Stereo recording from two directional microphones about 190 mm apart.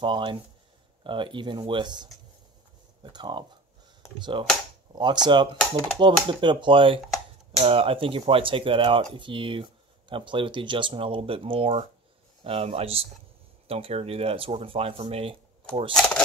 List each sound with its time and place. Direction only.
0.0 s speech: 25° right (ahead or behind)
15.9 s speech: 5° left (ahead or behind)